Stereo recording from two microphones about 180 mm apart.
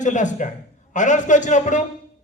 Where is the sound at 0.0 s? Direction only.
45° left (ahead or behind).